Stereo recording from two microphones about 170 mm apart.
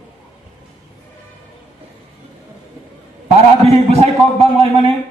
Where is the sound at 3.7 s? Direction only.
40° right (ahead or behind).